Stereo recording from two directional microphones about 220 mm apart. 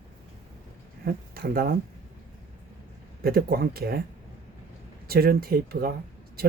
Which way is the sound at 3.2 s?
45° right (ahead or behind).